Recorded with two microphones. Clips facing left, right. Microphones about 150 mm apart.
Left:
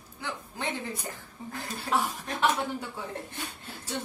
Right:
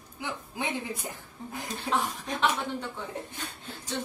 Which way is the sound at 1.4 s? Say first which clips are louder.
Even; 5° left (ahead or behind).